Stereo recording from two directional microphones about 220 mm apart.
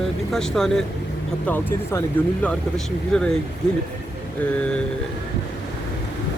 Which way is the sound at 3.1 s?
5° left (ahead or behind).